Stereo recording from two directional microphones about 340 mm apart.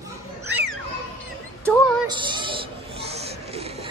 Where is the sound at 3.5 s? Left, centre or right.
Centre.